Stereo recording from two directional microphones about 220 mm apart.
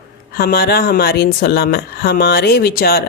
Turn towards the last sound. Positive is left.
turn(degrees=45)  # may be behind; listen again after turning